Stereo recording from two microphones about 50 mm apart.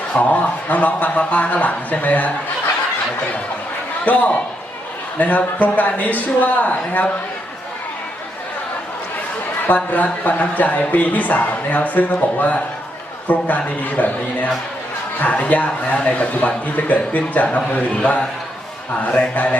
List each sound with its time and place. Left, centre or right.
0.1 s speech: left
4.0 s a man's voice: left
9.6 s a man's voice: left
19.1 s mantra: left